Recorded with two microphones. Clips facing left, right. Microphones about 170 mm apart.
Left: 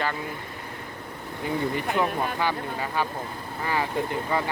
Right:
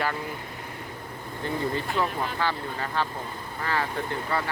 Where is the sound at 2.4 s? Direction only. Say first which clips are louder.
Left 2 dB; 15° left (ahead or behind).